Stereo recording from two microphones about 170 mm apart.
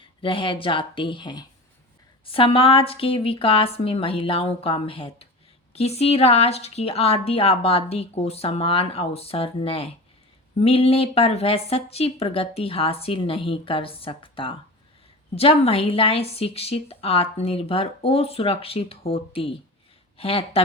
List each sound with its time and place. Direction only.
0.0 s speech: 30° left (ahead or behind)